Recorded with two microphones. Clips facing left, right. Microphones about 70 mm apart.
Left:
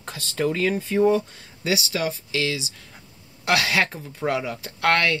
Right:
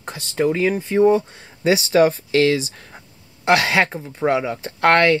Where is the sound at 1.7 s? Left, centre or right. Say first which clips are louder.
Right 10 dB; right.